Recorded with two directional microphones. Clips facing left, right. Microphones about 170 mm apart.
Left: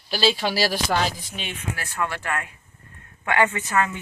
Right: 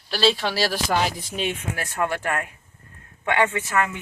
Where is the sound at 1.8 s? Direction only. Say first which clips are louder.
Right 3 dB; 50° right (ahead or behind).